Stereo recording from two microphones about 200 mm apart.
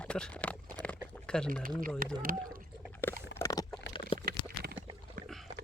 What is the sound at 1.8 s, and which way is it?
Speech, 45° right (ahead or behind).